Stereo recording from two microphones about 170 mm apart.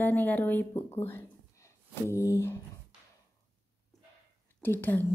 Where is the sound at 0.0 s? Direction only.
10° left (ahead or behind).